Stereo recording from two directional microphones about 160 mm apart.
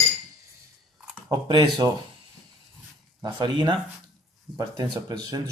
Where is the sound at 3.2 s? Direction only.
30° right (ahead or behind).